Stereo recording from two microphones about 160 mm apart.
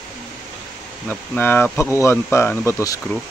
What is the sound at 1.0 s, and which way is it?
Speech, 10° left (ahead or behind).